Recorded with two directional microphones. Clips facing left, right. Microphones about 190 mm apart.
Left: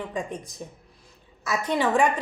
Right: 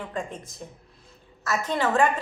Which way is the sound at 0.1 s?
15° left (ahead or behind).